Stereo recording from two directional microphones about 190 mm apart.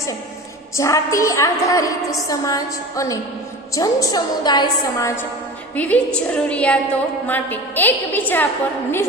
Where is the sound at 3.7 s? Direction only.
15° left (ahead or behind).